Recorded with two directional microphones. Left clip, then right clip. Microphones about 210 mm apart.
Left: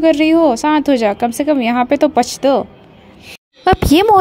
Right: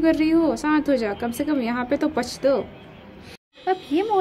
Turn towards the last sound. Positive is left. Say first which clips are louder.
# left 12 dB
turn(degrees=55)  # may be behind; listen again after turning